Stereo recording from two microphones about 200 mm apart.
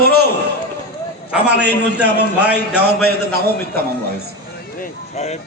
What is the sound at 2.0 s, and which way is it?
A man's voice, 55° right (ahead or behind).